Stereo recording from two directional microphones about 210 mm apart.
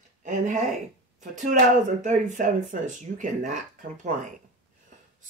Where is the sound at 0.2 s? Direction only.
35° right (ahead or behind).